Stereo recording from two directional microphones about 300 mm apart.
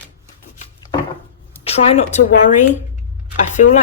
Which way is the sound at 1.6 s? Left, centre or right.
Centre.